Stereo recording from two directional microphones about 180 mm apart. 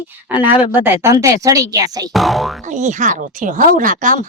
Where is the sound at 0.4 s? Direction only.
10° right (ahead or behind).